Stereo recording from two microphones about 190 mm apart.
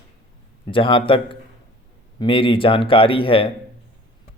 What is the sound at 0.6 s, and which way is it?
Speech, 25° left (ahead or behind).